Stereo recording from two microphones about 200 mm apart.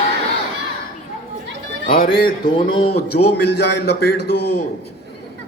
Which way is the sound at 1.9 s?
45° left (ahead or behind).